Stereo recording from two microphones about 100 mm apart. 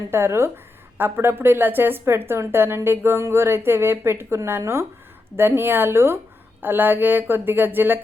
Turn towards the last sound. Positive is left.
turn(degrees=-20)  # may be behind; listen again after turning